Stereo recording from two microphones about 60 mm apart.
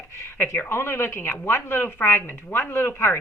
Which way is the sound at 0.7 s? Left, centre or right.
Left.